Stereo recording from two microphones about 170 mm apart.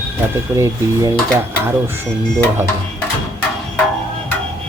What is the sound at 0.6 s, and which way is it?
Speech, 15° right (ahead or behind).